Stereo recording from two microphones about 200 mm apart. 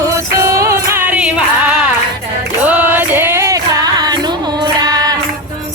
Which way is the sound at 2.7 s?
10° right (ahead or behind).